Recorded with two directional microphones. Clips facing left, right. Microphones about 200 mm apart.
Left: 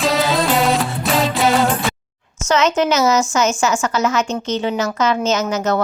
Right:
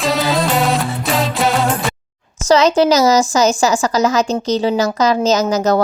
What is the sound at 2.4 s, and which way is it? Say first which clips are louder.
A woman's voice: right 5 dB; 35° right (ahead or behind).